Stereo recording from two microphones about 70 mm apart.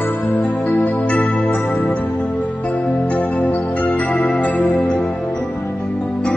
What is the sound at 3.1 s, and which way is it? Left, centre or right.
Music, left.